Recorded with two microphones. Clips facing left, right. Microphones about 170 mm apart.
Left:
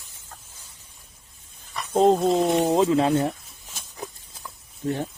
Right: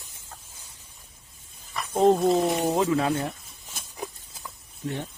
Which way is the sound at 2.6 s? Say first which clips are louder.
Left 4 dB; 20° left (ahead or behind).